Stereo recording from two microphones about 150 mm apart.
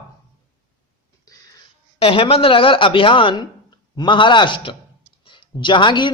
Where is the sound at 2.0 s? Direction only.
35° left (ahead or behind).